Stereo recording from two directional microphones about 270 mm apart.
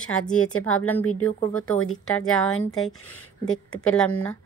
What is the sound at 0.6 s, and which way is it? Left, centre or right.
Speech, left.